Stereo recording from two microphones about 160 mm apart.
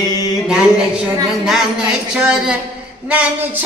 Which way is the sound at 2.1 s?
5° right (ahead or behind).